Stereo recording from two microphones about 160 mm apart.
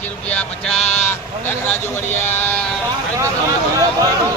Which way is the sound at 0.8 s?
45° left (ahead or behind).